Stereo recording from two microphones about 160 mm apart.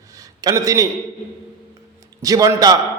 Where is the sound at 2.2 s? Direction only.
20° right (ahead or behind).